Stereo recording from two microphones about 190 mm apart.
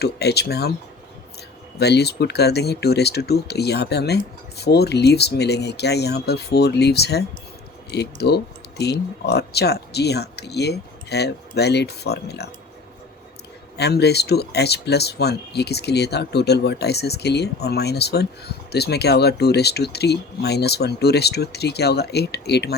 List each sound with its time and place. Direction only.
0.0 s speech: 60° left (ahead or behind)
1.8 s speech: 60° left (ahead or behind)
13.7 s speech: 60° left (ahead or behind)